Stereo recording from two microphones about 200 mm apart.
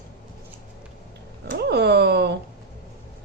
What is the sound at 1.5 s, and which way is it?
Speech, 55° right (ahead or behind).